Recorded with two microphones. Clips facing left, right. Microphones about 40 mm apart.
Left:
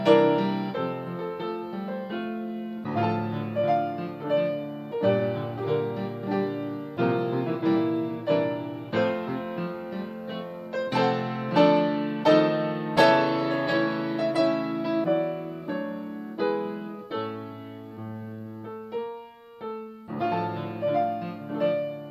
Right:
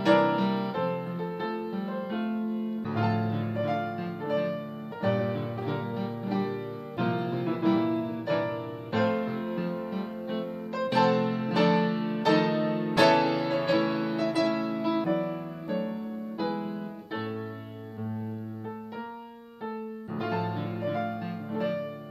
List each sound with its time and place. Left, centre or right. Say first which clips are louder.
0.0 s music: left 3 dB; left
0.4 s music: left 1 dB; centre
0.7 s music: even; centre
1.4 s music: even; centre
2.0 s music: right 1 dB; centre
5.9 s music: left 2 dB; centre
6.5 s music: left 3 dB; centre
11.0 s music: right 2 dB; centre
20.2 s music: left 3 dB; centre